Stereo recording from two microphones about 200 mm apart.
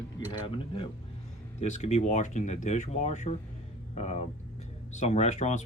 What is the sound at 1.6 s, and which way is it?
Speech, 35° left (ahead or behind).